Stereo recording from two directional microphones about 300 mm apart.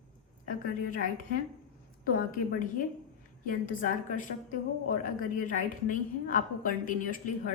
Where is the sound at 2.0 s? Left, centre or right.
Left.